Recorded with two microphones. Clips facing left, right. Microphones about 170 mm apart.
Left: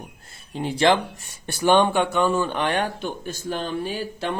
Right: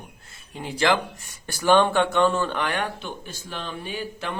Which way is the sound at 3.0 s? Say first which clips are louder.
Left 7 dB; 45° left (ahead or behind).